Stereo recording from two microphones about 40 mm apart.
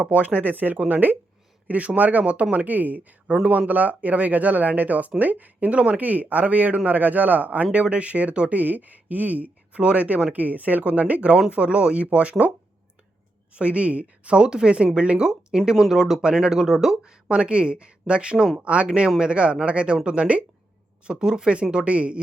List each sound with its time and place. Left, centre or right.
0.0 s a man's voice: right
13.6 s speech: right
14.4 s speech: right
15.3 s speech: centre
17.0 s speech: right
18.9 s speech: right
21.1 s speech: centre